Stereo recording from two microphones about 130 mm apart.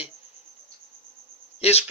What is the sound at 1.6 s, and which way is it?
Speech, 55° left (ahead or behind).